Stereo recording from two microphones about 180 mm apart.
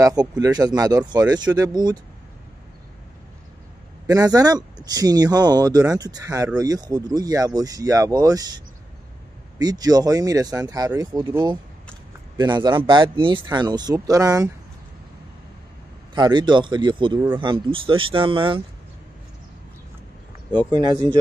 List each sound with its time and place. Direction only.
0.0 s speech: 20° right (ahead or behind)
4.1 s speech: 20° right (ahead or behind)
9.6 s speech: 20° right (ahead or behind)
16.2 s speech: 25° right (ahead or behind)
20.7 s speech: 25° right (ahead or behind)